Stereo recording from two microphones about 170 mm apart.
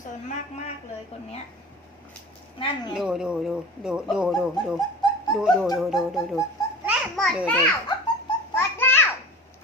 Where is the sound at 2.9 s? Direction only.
5° right (ahead or behind).